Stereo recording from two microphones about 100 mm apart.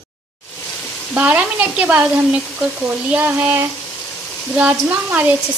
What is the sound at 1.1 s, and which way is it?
Speech, 15° right (ahead or behind).